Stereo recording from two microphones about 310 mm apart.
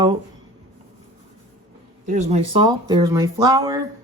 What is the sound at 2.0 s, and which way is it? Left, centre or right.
Speech, right.